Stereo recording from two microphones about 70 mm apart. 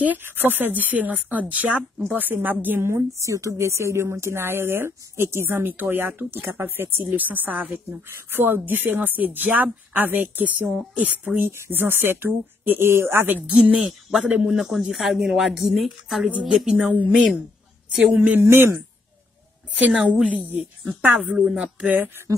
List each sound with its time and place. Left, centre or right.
0.0 s speech: right
2.9 s speech: right
13.7 s a woman's voice: centre
16.8 s speech: right
17.1 s speech: centre
18.1 s speech: centre
18.4 s speech: right
19.7 s speech: centre
21.2 s speech: centre